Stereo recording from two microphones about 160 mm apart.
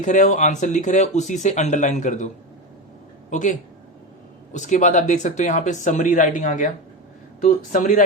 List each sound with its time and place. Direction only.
0.0 s speech: 50° left (ahead or behind)